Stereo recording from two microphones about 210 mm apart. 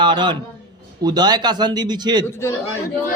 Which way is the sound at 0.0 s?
20° right (ahead or behind).